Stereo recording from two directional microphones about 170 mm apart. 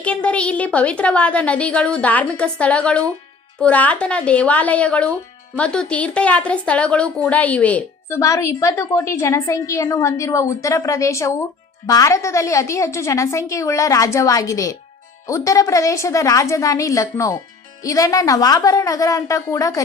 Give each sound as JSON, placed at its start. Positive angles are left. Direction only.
{"t": 0.0, "sound": "a woman's voice", "side_deg": 10}